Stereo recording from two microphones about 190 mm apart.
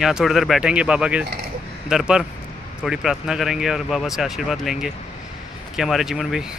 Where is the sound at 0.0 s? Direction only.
Centre (ahead or behind).